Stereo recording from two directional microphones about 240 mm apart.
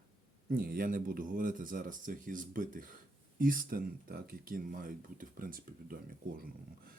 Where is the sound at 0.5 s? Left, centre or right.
Right.